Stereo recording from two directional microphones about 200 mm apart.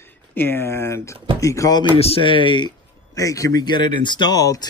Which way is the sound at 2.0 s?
25° left (ahead or behind).